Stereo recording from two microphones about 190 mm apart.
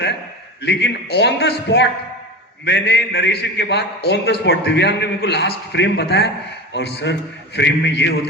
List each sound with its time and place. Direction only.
0.6 s a man's voice: 65° left (ahead or behind)